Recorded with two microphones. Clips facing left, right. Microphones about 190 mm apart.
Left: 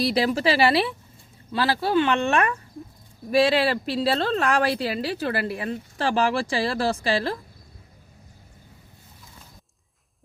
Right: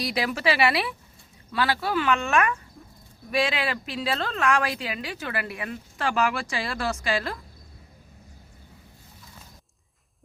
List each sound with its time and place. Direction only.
0.0 s speech: 30° left (ahead or behind)